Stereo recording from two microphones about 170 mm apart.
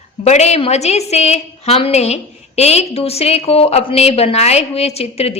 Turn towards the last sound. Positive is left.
turn(degrees=40)  # may be behind; listen again after turning